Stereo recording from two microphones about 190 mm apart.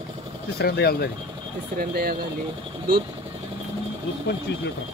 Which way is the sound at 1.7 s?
55° right (ahead or behind).